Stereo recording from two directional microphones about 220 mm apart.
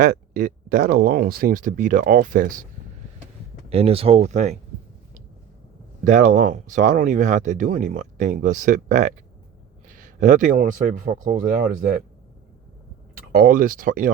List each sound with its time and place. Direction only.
0.0 s speech: 40° right (ahead or behind)
3.7 s speech: 25° right (ahead or behind)
6.1 s speech: 35° right (ahead or behind)
10.2 s speech: 35° right (ahead or behind)
13.4 s speech: 40° right (ahead or behind)